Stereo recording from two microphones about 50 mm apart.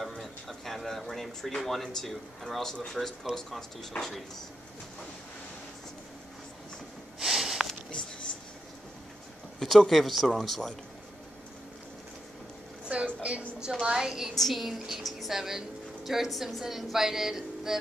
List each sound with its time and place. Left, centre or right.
0.0 s speech: centre
7.2 s sniff: centre
9.6 s speech: centre
12.8 s a sound: right
13.7 s a woman's voice: centre
14.3 s a woman's voice: centre